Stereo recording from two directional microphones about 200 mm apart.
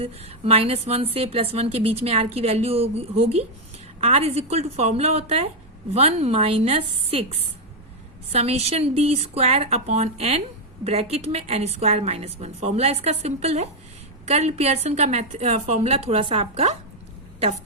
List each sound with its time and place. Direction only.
0.0 s a woman's voice: 30° right (ahead or behind)
8.3 s a woman's voice: 30° right (ahead or behind)